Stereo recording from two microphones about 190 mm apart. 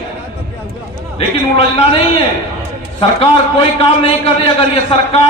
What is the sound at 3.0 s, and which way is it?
A man's voice, 30° left (ahead or behind).